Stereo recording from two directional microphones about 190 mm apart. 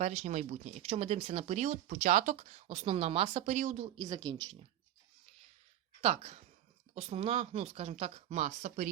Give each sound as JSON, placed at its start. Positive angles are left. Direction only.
{"t": 0.0, "sound": "speech", "side_deg": -35}
{"t": 3.9, "sound": "speech", "side_deg": -20}
{"t": 6.0, "sound": "speech", "side_deg": -35}